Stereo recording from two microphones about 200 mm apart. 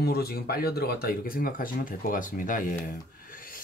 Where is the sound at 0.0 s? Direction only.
50° left (ahead or behind).